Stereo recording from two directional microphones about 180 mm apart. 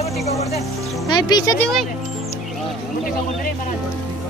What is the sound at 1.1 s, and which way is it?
Speech, 25° left (ahead or behind).